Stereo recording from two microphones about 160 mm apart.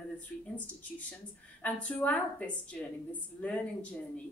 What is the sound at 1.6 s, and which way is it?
A woman's voice, 10° left (ahead or behind).